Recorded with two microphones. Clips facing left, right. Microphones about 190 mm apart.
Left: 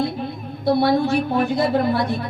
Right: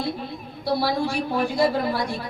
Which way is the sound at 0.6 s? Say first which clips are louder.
Left 6 dB; 20° left (ahead or behind).